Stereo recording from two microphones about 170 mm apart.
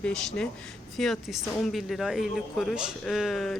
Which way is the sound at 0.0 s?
5° left (ahead or behind).